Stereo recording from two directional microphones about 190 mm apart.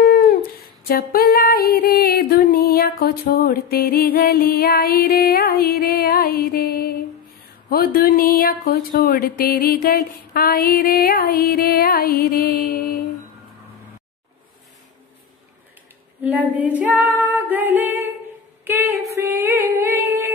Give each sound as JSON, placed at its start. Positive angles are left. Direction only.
{"t": 0.0, "sound": "female singing", "side_deg": 50}
{"t": 16.2, "sound": "female singing", "side_deg": -10}